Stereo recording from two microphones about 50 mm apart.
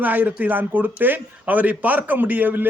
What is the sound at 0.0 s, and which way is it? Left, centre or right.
A man's voice, right.